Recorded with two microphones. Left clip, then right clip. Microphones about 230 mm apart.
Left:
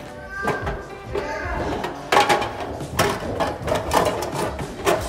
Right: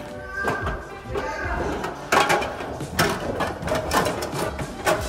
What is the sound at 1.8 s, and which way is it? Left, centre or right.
Mechanisms, centre.